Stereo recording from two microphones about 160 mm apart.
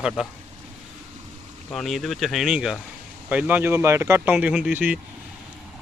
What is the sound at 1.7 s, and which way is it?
Speech, centre (ahead or behind).